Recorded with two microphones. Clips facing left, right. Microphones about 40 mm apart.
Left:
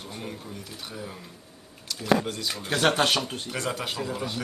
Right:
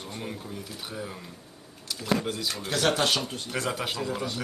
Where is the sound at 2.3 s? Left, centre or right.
Centre.